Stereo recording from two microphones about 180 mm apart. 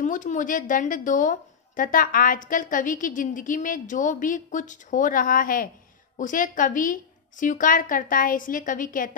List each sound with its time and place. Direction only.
0.0 s a woman's voice: 45° left (ahead or behind)